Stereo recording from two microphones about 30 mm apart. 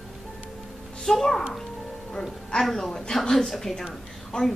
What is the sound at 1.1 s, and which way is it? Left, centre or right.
Speech, centre.